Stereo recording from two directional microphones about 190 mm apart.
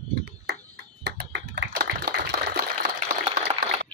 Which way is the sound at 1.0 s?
65° right (ahead or behind).